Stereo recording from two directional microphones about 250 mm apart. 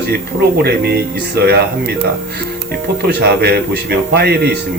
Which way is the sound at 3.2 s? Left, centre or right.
Right.